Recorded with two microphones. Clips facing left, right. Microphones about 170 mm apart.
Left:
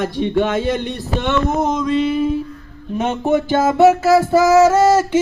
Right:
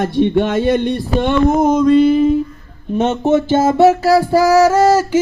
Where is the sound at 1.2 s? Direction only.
50° right (ahead or behind).